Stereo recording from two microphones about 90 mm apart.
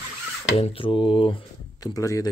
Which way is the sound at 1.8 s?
40° left (ahead or behind).